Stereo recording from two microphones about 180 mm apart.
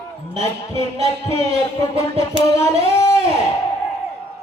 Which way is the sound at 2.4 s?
15° left (ahead or behind).